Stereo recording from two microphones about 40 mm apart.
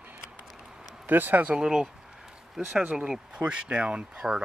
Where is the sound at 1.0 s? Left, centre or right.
Right.